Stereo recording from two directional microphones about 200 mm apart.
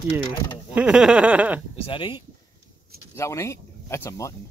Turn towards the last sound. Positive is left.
turn(degrees=15)  # may be behind; listen again after turning